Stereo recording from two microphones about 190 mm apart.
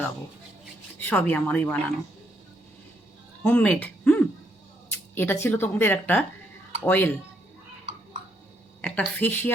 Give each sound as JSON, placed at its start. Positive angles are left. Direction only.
{"t": 0.9, "sound": "a woman's voice", "side_deg": 10}
{"t": 3.4, "sound": "a woman's voice", "side_deg": 10}
{"t": 8.8, "sound": "a woman's voice", "side_deg": 10}